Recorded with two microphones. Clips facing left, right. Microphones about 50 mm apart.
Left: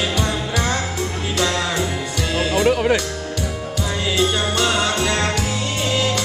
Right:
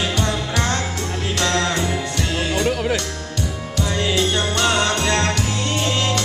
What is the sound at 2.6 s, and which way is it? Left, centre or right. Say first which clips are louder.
Music: left 5 dB; centre.